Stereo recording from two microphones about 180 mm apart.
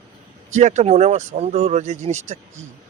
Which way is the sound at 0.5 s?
40° right (ahead or behind).